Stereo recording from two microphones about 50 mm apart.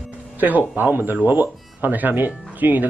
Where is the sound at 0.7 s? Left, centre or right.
Right.